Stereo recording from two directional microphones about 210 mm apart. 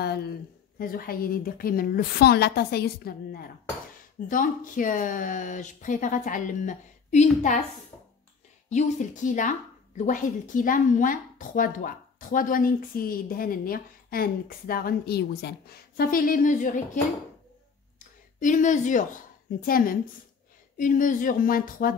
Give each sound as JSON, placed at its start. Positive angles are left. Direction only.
{"t": 0.0, "sound": "a woman's voice", "side_deg": 50}
{"t": 8.6, "sound": "a woman's voice", "side_deg": 35}